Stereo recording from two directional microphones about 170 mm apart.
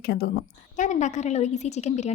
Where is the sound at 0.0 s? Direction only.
65° left (ahead or behind).